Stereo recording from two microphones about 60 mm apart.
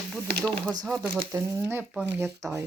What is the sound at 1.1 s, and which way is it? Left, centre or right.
Speech, right.